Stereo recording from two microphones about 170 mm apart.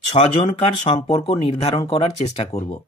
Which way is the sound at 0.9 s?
30° left (ahead or behind).